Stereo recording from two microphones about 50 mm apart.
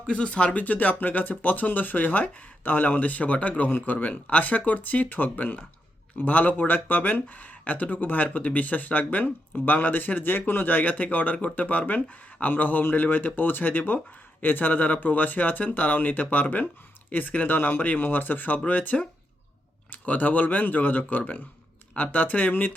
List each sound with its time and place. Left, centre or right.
0.0 s speech: left
3.7 s a man's voice: left
3.9 s speech: left
12.8 s speech: left